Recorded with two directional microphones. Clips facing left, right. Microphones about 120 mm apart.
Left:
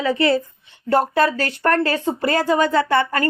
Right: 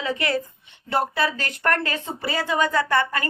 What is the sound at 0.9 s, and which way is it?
Speech, 45° left (ahead or behind).